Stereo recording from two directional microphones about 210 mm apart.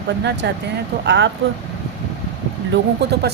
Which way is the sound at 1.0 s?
60° right (ahead or behind).